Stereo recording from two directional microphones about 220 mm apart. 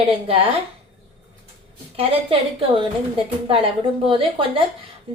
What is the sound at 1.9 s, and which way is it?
Speech, 25° right (ahead or behind).